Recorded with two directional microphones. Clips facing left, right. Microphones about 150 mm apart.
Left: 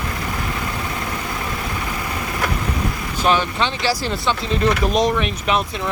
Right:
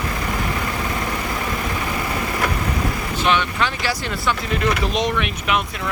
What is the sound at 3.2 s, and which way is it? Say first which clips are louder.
Speech: left 2 dB; 35° left (ahead or behind).